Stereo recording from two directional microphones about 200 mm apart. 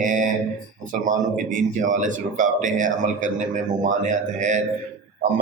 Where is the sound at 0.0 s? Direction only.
40° right (ahead or behind).